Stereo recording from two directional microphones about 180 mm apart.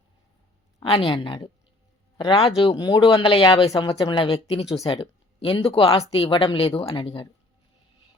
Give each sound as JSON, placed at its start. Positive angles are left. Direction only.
{"t": 0.8, "sound": "speech", "side_deg": 30}